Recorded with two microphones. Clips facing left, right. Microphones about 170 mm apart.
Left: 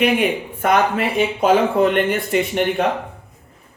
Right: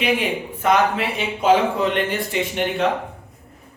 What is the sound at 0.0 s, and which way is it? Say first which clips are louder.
Speech: left 4 dB; 55° left (ahead or behind).